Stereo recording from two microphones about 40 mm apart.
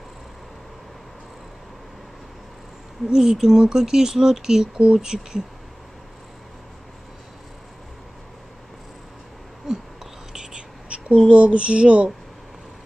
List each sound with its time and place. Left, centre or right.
3.1 s speech: centre
10.3 s whispering: centre
11.2 s speech: right